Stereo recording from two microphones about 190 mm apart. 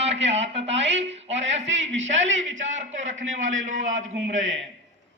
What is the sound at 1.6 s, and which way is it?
A man's voice, 75° right (ahead or behind).